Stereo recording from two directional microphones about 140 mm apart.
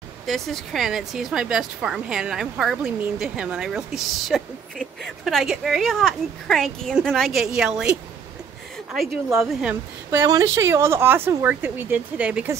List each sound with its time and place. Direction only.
0.3 s a woman's voice: centre (ahead or behind)
9.4 s a woman's voice: 5° right (ahead or behind)
10.1 s speech: 25° right (ahead or behind)